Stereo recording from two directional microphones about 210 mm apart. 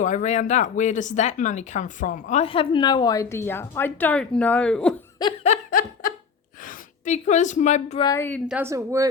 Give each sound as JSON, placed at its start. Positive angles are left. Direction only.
{"t": 0.0, "sound": "speech", "side_deg": 35}
{"t": 2.3, "sound": "a woman's voice", "side_deg": 25}
{"t": 5.2, "sound": "a sound", "side_deg": 30}
{"t": 6.6, "sound": "a woman's voice", "side_deg": 40}
{"t": 8.1, "sound": "a woman's voice", "side_deg": 10}
{"t": 8.4, "sound": "speech", "side_deg": -10}